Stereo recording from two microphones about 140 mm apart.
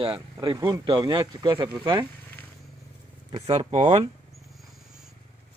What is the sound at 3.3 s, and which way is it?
Speech, 40° right (ahead or behind).